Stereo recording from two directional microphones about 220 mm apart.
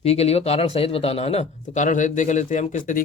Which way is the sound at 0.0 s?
30° left (ahead or behind).